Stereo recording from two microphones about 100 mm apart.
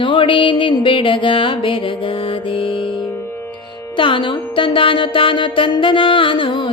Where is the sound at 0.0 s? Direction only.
60° left (ahead or behind).